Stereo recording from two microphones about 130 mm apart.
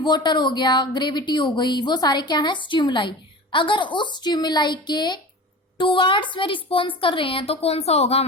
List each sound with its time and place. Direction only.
0.0 s a woman's voice: 35° left (ahead or behind); by 8.3 s 55° left (ahead or behind)